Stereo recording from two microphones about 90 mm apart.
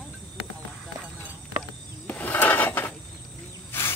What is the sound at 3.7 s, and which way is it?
Wild animals, 25° left (ahead or behind).